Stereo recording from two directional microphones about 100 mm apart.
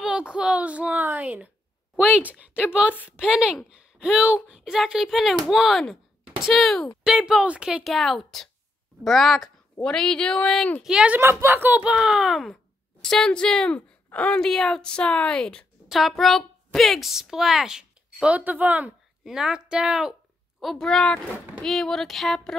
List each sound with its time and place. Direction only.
0.0 s speech: 10° right (ahead or behind)
2.9 s a woman's voice: 20° left (ahead or behind)
3.2 s a woman's voice: 10° right (ahead or behind)
7.9 s a woman's voice: centre (ahead or behind)
10.8 s speech: 10° right (ahead or behind)
11.1 s speech: 25° right (ahead or behind); by 15.6 s 10° left (ahead or behind)
15.9 s a woman's voice: centre (ahead or behind)
20.6 s a woman's voice: 5° left (ahead or behind)